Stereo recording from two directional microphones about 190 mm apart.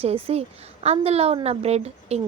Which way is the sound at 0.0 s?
30° right (ahead or behind).